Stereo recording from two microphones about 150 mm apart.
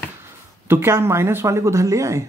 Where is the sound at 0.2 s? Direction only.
15° right (ahead or behind).